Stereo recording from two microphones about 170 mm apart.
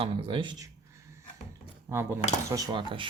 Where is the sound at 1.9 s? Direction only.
15° right (ahead or behind).